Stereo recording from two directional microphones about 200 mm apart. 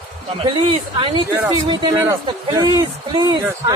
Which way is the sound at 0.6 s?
25° right (ahead or behind).